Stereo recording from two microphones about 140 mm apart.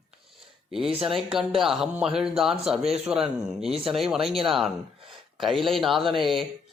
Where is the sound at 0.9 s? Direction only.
5° right (ahead or behind).